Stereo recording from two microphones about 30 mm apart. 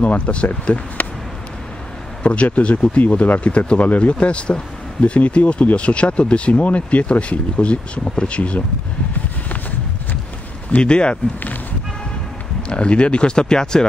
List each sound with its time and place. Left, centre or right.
0.3 s speech: left
2.2 s speech: left
10.8 s speech: left
12.6 s speech: left